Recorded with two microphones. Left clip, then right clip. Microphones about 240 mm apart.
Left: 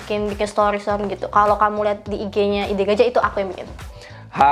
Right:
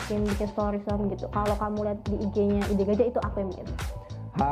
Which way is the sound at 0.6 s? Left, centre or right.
Centre.